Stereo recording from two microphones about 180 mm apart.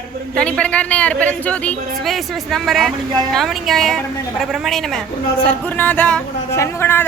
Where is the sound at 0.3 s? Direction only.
5° left (ahead or behind).